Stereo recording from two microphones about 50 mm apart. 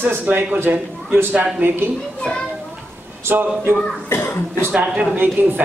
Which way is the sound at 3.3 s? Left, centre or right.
Right.